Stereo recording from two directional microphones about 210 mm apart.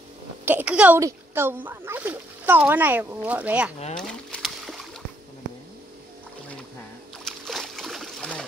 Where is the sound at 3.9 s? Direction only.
5° left (ahead or behind).